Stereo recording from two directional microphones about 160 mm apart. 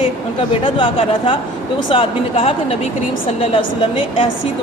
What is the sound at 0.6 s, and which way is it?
A man's voice, 35° left (ahead or behind).